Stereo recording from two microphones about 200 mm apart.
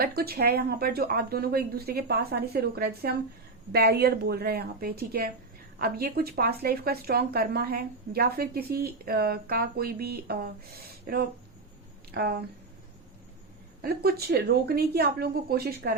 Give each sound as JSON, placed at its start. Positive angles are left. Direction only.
{"t": 0.0, "sound": "speech", "side_deg": -50}
{"t": 12.1, "sound": "speech", "side_deg": -50}
{"t": 13.8, "sound": "speech", "side_deg": -50}